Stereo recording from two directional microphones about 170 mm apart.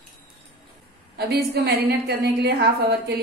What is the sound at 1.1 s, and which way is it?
A woman's voice, 70° right (ahead or behind).